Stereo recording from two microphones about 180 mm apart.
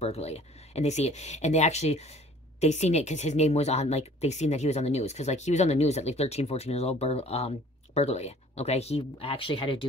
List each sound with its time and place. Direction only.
0.0 s speech: 35° left (ahead or behind)